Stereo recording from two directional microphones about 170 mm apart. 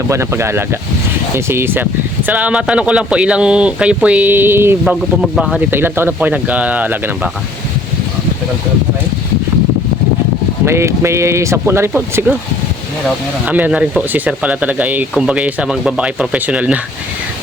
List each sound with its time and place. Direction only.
0.1 s speech: 15° right (ahead or behind)
5.2 s speech: 5° right (ahead or behind)
10.7 s speech: 15° right (ahead or behind)
13.5 s speech: 10° right (ahead or behind)